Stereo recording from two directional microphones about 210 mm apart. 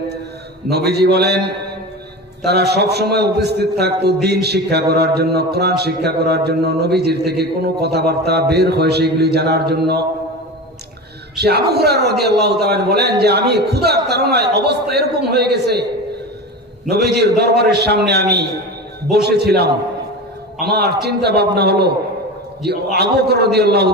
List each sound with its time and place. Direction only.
0.7 s a man's voice: 50° right (ahead or behind)
2.4 s a man's voice: 50° right (ahead or behind)
11.3 s a man's voice: 50° right (ahead or behind)
16.9 s a man's voice: 50° right (ahead or behind)